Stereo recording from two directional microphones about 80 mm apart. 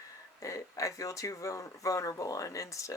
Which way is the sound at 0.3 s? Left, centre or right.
Left.